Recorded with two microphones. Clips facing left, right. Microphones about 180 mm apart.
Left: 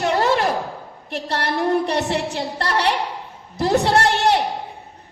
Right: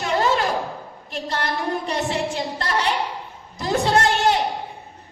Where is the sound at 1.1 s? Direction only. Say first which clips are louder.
Left 2 dB; 65° left (ahead or behind).